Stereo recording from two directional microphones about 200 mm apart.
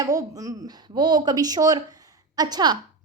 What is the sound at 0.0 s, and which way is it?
A woman's voice, 15° right (ahead or behind).